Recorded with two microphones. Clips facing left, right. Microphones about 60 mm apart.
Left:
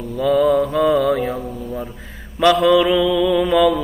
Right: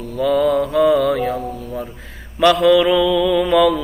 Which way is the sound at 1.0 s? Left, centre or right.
Centre.